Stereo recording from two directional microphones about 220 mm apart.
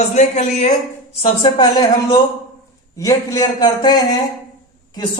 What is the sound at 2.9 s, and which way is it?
Speech, 15° left (ahead or behind).